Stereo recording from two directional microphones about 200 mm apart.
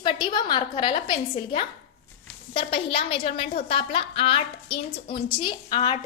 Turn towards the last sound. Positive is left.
turn(degrees=25)  # may be behind; listen again after turning